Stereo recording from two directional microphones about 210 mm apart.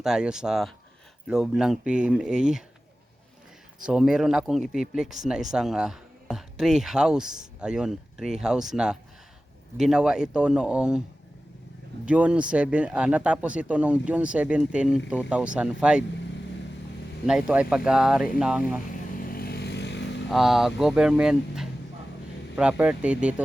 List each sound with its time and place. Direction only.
0.0 s speech: 5° right (ahead or behind)
3.8 s speech: 5° right (ahead or behind)
12.0 s speech: 5° right (ahead or behind)
17.2 s speech: 5° right (ahead or behind)
19.1 s vehicle: 45° left (ahead or behind)
20.3 s speech: centre (ahead or behind)